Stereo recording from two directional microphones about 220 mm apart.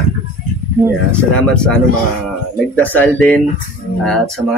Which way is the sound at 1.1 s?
5° left (ahead or behind).